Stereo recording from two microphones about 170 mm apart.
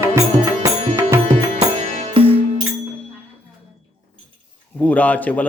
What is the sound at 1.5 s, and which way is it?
Music, 40° right (ahead or behind).